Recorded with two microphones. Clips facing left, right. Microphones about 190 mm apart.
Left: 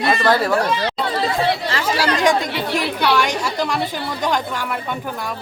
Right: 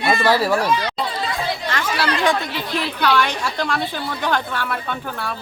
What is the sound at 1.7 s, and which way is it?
Speech, 35° left (ahead or behind).